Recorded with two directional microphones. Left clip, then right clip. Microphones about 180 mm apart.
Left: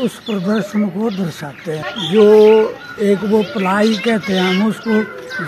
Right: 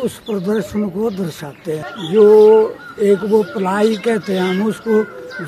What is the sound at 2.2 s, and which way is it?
Speech, 15° right (ahead or behind).